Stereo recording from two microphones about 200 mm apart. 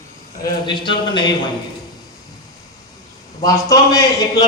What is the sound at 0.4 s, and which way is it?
Speech, 25° left (ahead or behind).